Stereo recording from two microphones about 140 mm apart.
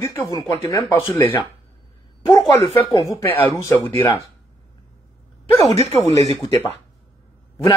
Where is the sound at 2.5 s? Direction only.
25° left (ahead or behind).